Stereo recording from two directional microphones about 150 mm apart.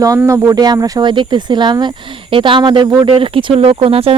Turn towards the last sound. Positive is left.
turn(degrees=-40)  # may be behind; listen again after turning